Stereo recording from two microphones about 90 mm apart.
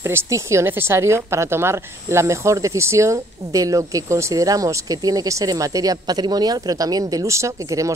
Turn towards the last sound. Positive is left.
turn(degrees=-40)  # may be behind; listen again after turning